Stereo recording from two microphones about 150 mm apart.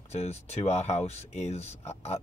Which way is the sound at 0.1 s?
45° left (ahead or behind).